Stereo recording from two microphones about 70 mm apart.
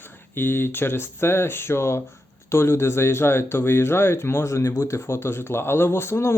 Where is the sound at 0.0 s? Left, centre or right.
Left.